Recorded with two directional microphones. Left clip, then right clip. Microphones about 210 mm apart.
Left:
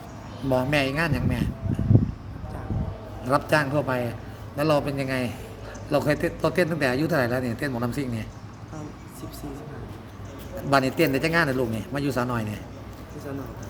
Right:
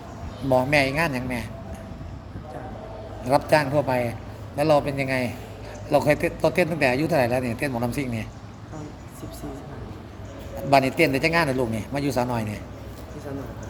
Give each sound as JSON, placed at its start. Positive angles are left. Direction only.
{"t": 0.5, "sound": "a man's voice", "side_deg": 0}
{"t": 3.2, "sound": "a man's voice", "side_deg": 0}
{"t": 10.7, "sound": "a man's voice", "side_deg": 0}